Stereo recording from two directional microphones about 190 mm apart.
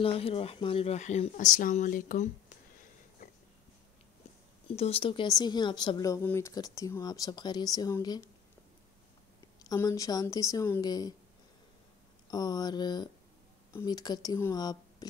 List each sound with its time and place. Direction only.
0.0 s speech: 30° left (ahead or behind)
3.2 s a sound: 40° left (ahead or behind)
4.6 s speech: 30° left (ahead or behind)
9.6 s speech: 20° left (ahead or behind)
12.3 s speech: 20° left (ahead or behind)